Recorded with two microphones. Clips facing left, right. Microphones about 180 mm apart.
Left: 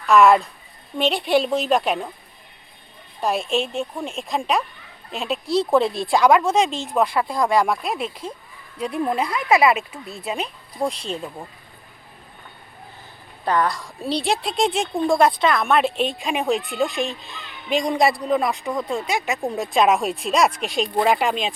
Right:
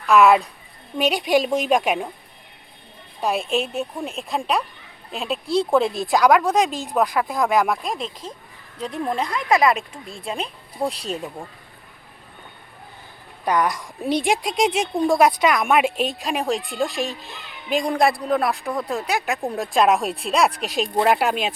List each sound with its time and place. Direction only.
0.1 s a woman's voice: centre (ahead or behind)
3.2 s speech: centre (ahead or behind)
13.4 s a woman's voice: 15° right (ahead or behind)
16.1 s speech: centre (ahead or behind)